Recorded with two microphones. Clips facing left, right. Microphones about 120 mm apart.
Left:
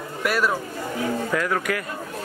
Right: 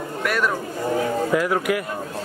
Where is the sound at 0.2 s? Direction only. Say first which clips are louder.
Even; 5° left (ahead or behind).